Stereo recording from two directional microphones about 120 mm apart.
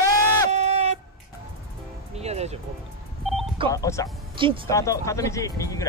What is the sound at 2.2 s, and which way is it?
Music, 65° right (ahead or behind).